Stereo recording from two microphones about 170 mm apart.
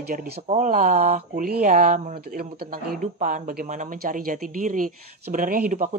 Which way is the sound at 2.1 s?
65° right (ahead or behind).